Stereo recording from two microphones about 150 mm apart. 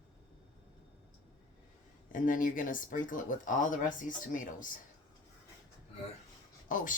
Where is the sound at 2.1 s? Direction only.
60° left (ahead or behind).